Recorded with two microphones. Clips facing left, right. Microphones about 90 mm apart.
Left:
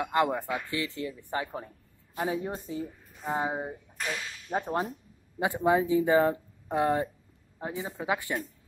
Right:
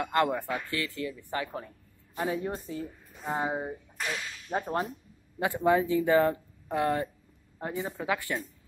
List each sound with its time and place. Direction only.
0.0 s speech: 15° left (ahead or behind)